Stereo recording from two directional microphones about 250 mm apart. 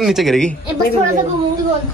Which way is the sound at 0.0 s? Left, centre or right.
Centre.